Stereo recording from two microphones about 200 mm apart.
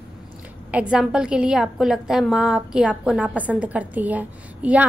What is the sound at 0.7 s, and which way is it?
A woman's voice, 5° right (ahead or behind).